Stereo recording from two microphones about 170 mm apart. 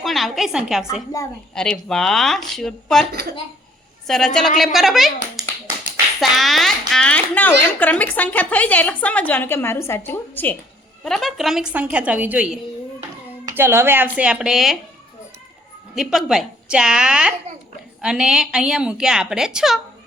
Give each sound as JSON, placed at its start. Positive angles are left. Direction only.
{"t": 0.0, "sound": "a woman's voice", "side_deg": 0}
{"t": 1.2, "sound": "a woman's voice", "side_deg": 20}
{"t": 1.5, "sound": "a woman's voice", "side_deg": 5}
{"t": 13.6, "sound": "speech", "side_deg": -15}
{"t": 16.0, "sound": "a woman's voice", "side_deg": 0}